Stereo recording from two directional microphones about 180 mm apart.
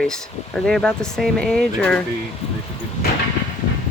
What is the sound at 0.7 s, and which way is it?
Speech, 5° left (ahead or behind).